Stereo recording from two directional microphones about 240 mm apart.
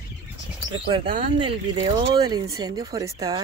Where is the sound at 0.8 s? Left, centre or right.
Right.